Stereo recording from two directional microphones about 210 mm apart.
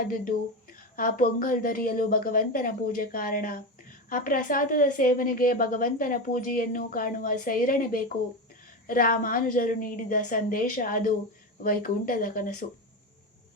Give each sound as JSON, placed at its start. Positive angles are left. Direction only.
{"t": 0.1, "sound": "a woman's voice", "side_deg": 40}